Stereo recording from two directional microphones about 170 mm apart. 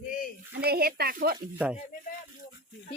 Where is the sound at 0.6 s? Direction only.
65° right (ahead or behind).